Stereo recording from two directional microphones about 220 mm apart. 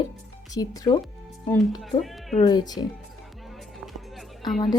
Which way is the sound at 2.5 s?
20° left (ahead or behind).